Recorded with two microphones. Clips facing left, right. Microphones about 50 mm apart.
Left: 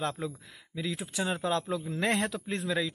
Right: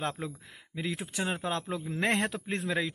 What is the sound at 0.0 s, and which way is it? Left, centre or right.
Speech, right.